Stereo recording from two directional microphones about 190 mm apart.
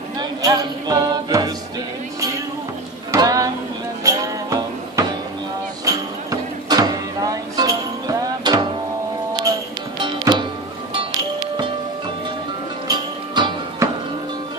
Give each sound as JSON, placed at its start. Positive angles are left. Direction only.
{"t": 0.2, "sound": "music", "side_deg": -20}
{"t": 3.1, "sound": "a sound", "side_deg": -20}
{"t": 4.0, "sound": "music", "side_deg": -20}
{"t": 5.9, "sound": "a sound", "side_deg": -20}
{"t": 9.9, "sound": "music", "side_deg": -25}
{"t": 12.8, "sound": "music", "side_deg": -20}